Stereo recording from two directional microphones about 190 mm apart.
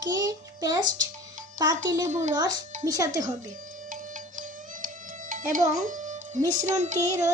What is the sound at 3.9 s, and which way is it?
Music, 45° right (ahead or behind).